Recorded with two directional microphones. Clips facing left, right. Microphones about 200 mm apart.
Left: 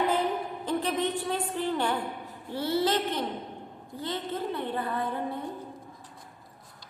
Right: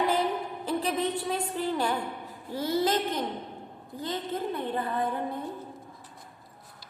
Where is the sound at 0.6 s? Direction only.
10° right (ahead or behind).